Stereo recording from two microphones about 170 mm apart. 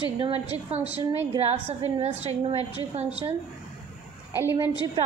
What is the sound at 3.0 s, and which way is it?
Speech, 35° right (ahead or behind).